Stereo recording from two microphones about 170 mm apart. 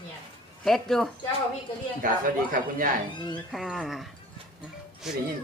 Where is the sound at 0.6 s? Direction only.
Centre (ahead or behind).